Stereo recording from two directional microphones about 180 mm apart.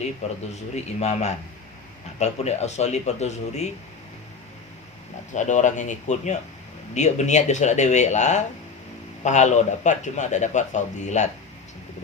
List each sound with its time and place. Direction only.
0.2 s a man's voice: 40° left (ahead or behind)
5.3 s a man's voice: 45° left (ahead or behind)